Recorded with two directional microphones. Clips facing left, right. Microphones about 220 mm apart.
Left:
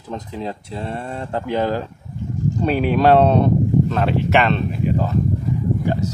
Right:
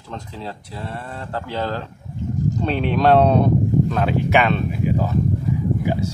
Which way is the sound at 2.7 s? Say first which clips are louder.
Left 2 dB; 5° left (ahead or behind).